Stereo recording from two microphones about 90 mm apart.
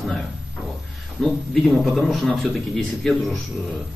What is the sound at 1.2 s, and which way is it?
Speech, 5° left (ahead or behind).